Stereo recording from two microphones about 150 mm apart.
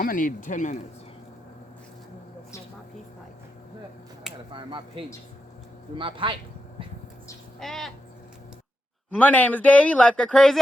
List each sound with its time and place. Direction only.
0.0 s speech: 65° left (ahead or behind)
4.5 s speech: 35° right (ahead or behind)
7.6 s owl: 5° left (ahead or behind)
9.1 s speech: 10° left (ahead or behind)